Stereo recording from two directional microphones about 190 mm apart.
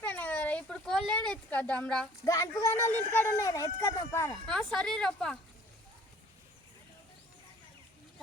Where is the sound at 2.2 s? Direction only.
15° left (ahead or behind).